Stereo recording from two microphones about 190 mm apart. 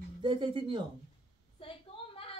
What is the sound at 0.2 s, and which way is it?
Speech, 25° right (ahead or behind).